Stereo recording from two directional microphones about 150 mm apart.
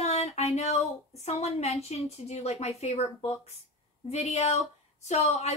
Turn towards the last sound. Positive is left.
turn(degrees=45)  # may be behind; listen again after turning